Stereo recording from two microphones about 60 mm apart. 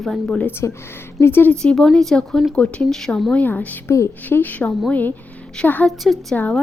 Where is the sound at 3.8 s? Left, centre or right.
Left.